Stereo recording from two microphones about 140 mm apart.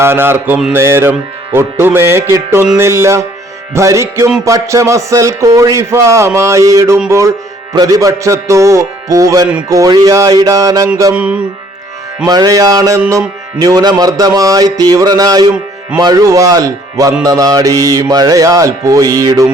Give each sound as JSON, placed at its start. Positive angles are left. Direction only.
{"t": 0.0, "sound": "music", "side_deg": -15}
{"t": 2.7, "sound": "a man's voice", "side_deg": -20}
{"t": 11.1, "sound": "music", "side_deg": -10}
{"t": 12.2, "sound": "a man's voice", "side_deg": -25}